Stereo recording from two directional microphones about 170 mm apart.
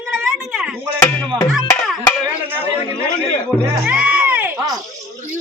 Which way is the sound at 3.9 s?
5° right (ahead or behind).